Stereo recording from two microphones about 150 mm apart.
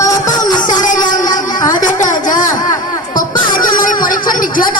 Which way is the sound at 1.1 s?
60° left (ahead or behind).